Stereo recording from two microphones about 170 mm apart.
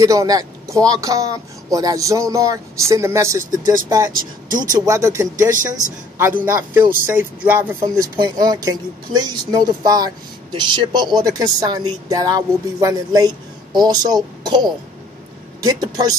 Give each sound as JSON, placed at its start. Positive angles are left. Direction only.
{"t": 0.0, "sound": "speech", "side_deg": -20}
{"t": 4.1, "sound": "speech", "side_deg": -55}
{"t": 4.7, "sound": "speech", "side_deg": -20}